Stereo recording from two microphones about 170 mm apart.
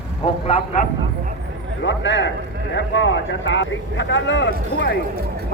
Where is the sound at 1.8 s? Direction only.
90° left.